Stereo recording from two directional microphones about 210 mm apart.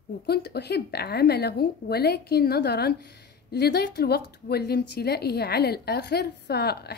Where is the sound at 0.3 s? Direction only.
50° left (ahead or behind).